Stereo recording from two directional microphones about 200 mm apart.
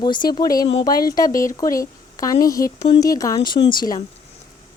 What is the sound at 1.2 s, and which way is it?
A woman's voice, 15° left (ahead or behind).